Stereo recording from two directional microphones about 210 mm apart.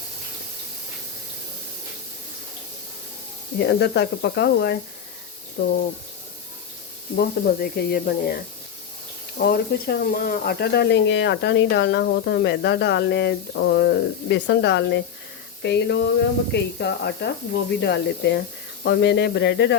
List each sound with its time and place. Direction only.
3.6 s speech: 50° left (ahead or behind)
7.2 s speech: 50° left (ahead or behind)
9.4 s speech: 45° left (ahead or behind)